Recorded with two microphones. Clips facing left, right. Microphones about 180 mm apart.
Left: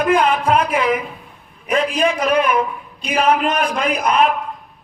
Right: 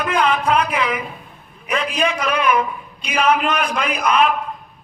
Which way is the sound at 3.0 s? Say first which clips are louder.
Left 1 dB; 35° left (ahead or behind).